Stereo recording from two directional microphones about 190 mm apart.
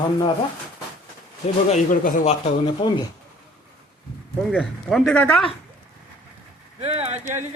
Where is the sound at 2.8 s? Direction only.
25° left (ahead or behind).